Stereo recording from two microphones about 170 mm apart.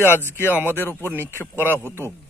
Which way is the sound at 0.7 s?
15° left (ahead or behind).